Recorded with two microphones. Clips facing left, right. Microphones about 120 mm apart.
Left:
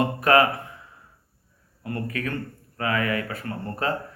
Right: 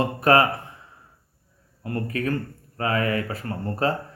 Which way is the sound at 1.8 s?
35° right (ahead or behind).